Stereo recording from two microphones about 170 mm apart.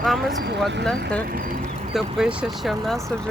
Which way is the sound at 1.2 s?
55° right (ahead or behind).